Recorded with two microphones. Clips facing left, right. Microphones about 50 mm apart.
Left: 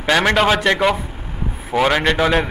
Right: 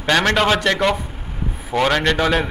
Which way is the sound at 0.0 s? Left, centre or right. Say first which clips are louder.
Left 1 dB; centre.